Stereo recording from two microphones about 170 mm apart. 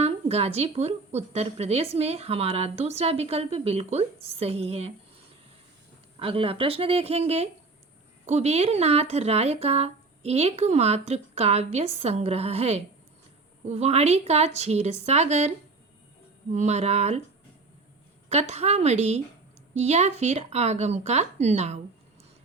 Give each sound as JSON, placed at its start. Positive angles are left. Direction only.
{"t": 0.0, "sound": "a woman's voice", "side_deg": -35}
{"t": 6.1, "sound": "a woman's voice", "side_deg": -35}
{"t": 18.3, "sound": "a woman's voice", "side_deg": -40}